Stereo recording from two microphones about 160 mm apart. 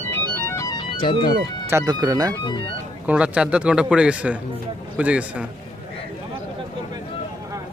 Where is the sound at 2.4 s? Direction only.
30° left (ahead or behind).